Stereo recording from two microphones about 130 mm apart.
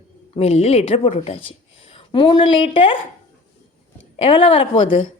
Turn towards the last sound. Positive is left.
turn(degrees=40)  # may be behind; listen again after turning